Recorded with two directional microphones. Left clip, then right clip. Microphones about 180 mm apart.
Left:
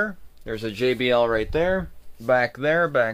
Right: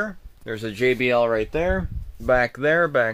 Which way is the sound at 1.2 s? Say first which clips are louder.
Even; 35° right (ahead or behind).